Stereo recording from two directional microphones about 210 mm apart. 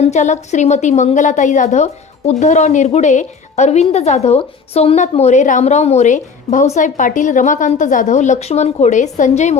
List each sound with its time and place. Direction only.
0.0 s a woman's voice: 35° left (ahead or behind)